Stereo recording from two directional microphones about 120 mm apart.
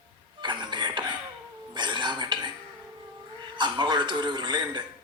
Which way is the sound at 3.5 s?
40° right (ahead or behind).